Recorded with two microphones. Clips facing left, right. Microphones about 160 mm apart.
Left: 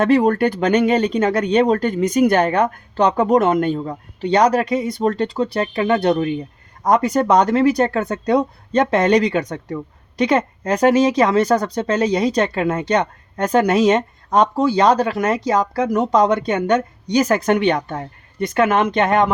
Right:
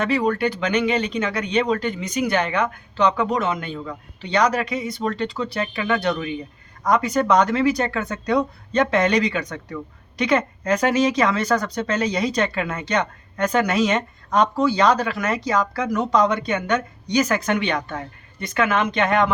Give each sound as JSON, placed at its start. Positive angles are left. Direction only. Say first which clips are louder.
{"t": 0.0, "sound": "speech", "louder": "left 6 dB", "side_deg": 50}
{"t": 10.2, "sound": "a woman's voice", "louder": "left 3 dB", "side_deg": 35}
{"t": 10.8, "sound": "speech", "louder": "left 6 dB", "side_deg": 45}
{"t": 11.7, "sound": "speech", "louder": "left 5 dB", "side_deg": 35}
{"t": 14.8, "sound": "speech", "louder": "left 4 dB", "side_deg": 40}